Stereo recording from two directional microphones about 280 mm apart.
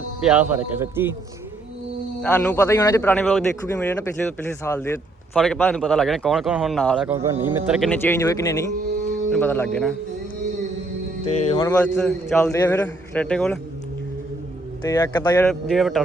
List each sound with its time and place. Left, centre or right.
0.3 s a man's voice: centre
2.2 s a man's voice: centre
11.4 s a man's voice: centre
14.8 s a man's voice: centre
15.4 s a man's voice: centre